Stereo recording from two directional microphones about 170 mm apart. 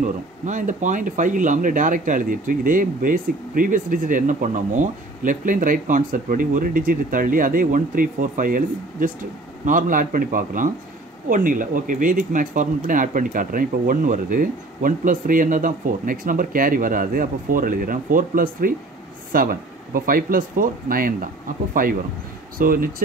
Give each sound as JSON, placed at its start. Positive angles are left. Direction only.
{"t": 0.0, "sound": "speech", "side_deg": -50}